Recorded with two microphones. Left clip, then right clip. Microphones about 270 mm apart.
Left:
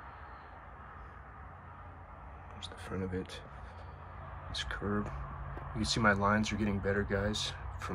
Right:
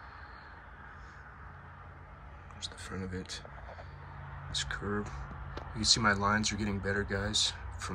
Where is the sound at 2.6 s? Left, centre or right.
Centre.